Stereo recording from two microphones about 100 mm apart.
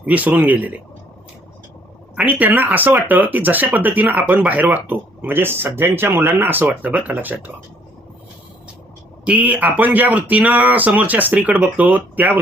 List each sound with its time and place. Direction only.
0.0 s speech: 15° right (ahead or behind)
2.1 s speech: 15° right (ahead or behind)
9.2 s speech: 15° right (ahead or behind)